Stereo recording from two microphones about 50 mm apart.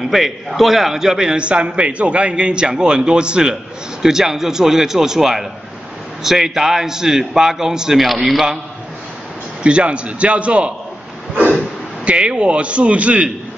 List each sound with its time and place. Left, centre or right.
0.1 s a man's voice: centre
9.6 s a man's voice: right